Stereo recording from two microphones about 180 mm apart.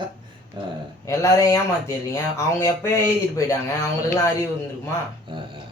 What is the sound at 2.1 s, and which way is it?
Speech, 15° left (ahead or behind).